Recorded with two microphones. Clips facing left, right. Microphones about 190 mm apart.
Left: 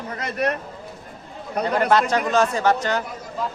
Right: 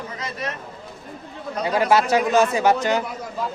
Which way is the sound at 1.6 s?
10° right (ahead or behind).